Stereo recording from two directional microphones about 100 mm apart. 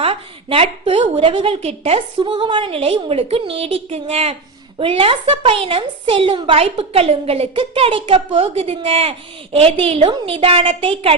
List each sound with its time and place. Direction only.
0.0 s a woman's voice: 75° right (ahead or behind)
4.8 s a woman's voice: 65° right (ahead or behind)